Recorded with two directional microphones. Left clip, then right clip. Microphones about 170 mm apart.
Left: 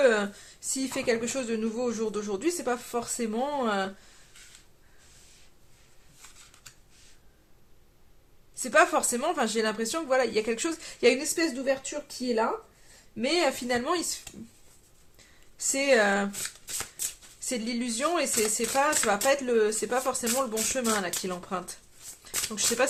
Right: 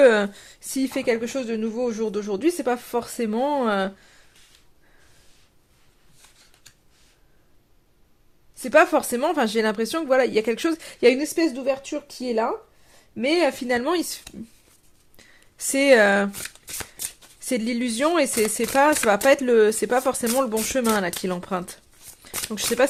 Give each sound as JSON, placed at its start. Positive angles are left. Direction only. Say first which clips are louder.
{"t": 0.0, "sound": "a woman's voice", "louder": "right 7 dB", "side_deg": -45}
{"t": 8.6, "sound": "a woman's voice", "louder": "right 5 dB", "side_deg": -40}